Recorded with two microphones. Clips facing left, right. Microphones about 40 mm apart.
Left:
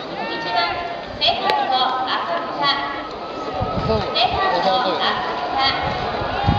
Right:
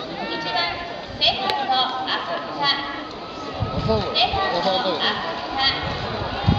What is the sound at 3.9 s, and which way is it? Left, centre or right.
A man's voice, left.